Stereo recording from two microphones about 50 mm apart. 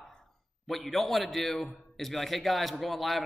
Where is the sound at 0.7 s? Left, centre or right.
Centre.